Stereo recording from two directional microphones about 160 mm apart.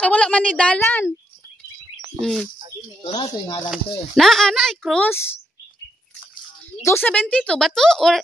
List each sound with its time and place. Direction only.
0.0 s a woman's voice: 5° left (ahead or behind)
2.1 s speech: centre (ahead or behind)
3.0 s speech: 25° left (ahead or behind)
3.6 s speech: centre (ahead or behind)
6.8 s speech: 15° left (ahead or behind)